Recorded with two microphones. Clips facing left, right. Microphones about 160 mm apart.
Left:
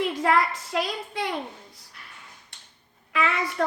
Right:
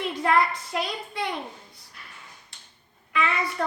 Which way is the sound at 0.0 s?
85° left.